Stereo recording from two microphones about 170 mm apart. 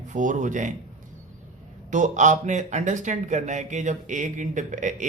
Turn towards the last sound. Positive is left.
turn(degrees=-50)  # may be behind; listen again after turning